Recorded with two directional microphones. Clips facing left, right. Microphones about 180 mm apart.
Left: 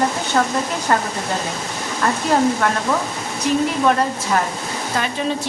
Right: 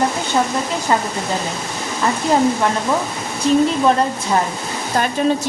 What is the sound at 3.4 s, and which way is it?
Speech, 30° right (ahead or behind).